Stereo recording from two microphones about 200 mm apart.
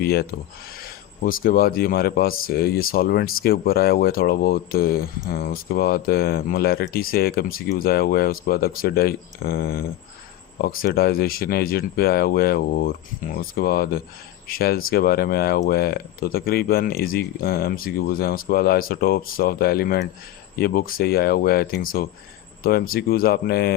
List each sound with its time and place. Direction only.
0.0 s speech: 50° left (ahead or behind)